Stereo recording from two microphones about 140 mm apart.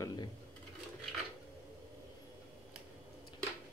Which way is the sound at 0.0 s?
30° left (ahead or behind).